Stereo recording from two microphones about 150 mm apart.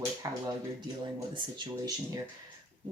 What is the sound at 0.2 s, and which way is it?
Speech, 25° right (ahead or behind).